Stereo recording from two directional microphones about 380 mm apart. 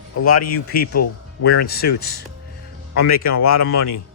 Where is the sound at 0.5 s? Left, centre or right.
Left.